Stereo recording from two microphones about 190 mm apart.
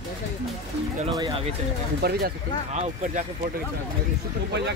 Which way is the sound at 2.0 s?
55° right (ahead or behind).